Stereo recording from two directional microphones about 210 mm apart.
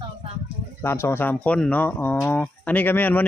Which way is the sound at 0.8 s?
10° left (ahead or behind).